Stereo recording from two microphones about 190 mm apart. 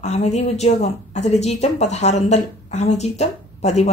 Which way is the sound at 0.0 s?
35° left (ahead or behind).